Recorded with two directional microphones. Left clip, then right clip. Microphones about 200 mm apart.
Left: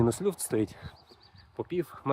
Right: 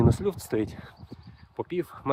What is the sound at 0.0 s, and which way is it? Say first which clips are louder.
Speech: right 2 dB; 10° right (ahead or behind).